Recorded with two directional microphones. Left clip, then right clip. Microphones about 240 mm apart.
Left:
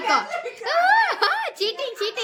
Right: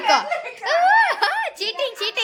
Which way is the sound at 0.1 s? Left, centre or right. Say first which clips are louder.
Right 4 dB; centre.